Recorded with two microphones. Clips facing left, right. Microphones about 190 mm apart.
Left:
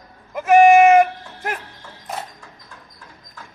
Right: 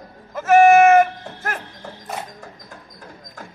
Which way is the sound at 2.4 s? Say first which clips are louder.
Right 5 dB; 45° right (ahead or behind).